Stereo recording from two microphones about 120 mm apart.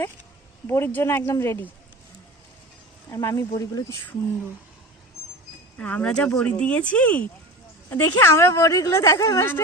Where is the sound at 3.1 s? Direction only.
25° left (ahead or behind).